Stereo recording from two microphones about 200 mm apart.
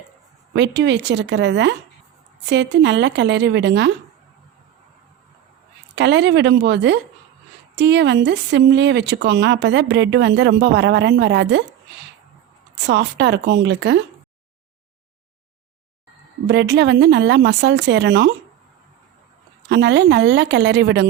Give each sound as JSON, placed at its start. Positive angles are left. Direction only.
{"t": 0.5, "sound": "speech", "side_deg": -60}
{"t": 5.9, "sound": "speech", "side_deg": -60}
{"t": 12.8, "sound": "speech", "side_deg": -60}
{"t": 16.5, "sound": "speech", "side_deg": -60}
{"t": 19.6, "sound": "speech", "side_deg": -60}